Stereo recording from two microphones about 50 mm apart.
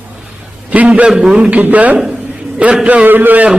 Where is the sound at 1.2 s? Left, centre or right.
Centre.